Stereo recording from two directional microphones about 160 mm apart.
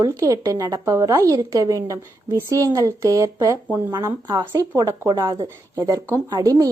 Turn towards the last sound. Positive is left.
turn(degrees=-20)  # may be behind; listen again after turning